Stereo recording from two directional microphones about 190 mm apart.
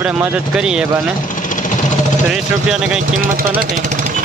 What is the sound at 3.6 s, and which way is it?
Speech, 40° right (ahead or behind).